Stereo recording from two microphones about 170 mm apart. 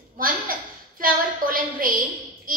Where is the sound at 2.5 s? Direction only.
55° right (ahead or behind).